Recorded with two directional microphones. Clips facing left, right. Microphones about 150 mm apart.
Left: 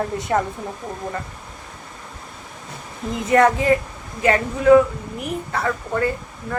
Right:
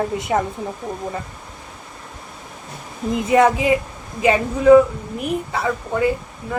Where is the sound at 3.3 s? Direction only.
15° right (ahead or behind).